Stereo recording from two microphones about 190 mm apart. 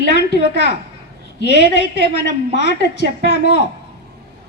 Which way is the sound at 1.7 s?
65° left (ahead or behind).